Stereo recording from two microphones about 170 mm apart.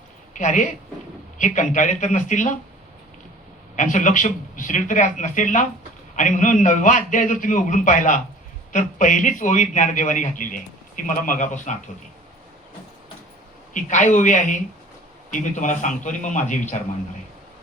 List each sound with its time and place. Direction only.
0.3 s a man's voice: 50° left (ahead or behind)
3.8 s a man's voice: 50° left (ahead or behind)
13.7 s a man's voice: 45° left (ahead or behind)